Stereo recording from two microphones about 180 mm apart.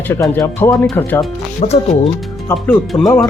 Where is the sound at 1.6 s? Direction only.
35° left (ahead or behind).